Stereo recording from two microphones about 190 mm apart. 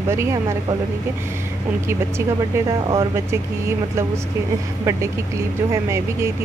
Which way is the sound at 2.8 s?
15° right (ahead or behind).